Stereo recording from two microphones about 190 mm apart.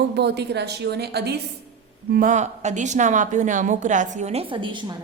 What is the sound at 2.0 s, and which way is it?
A woman's voice, 50° right (ahead or behind).